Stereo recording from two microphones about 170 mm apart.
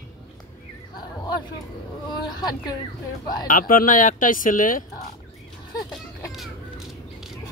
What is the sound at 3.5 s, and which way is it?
Speech, 55° left (ahead or behind).